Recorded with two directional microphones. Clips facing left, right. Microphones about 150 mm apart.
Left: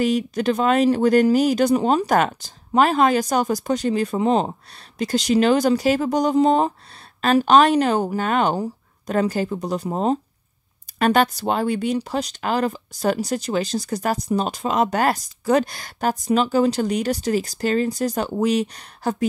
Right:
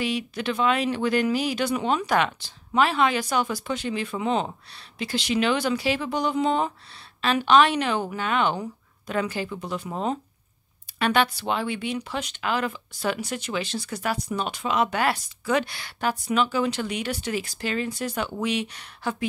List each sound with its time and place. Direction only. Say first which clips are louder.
0.0 s speech: left 7 dB; 45° left (ahead or behind)